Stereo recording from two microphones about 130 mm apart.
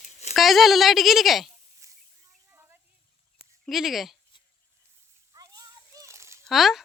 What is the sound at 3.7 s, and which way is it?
Speech, centre (ahead or behind).